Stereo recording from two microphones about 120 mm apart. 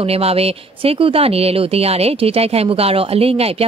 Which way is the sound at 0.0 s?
55° right (ahead or behind).